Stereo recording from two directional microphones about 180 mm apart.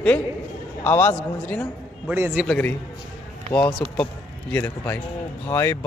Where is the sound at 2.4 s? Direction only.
5° left (ahead or behind).